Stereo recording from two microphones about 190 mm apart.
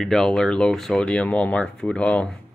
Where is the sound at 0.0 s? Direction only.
Centre (ahead or behind).